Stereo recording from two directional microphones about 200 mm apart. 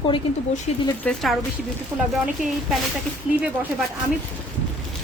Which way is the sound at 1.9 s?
15° right (ahead or behind).